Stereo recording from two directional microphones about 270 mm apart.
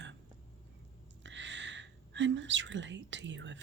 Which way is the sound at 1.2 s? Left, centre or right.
Right.